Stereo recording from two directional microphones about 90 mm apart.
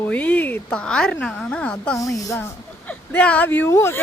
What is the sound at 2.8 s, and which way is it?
Speech, 15° left (ahead or behind).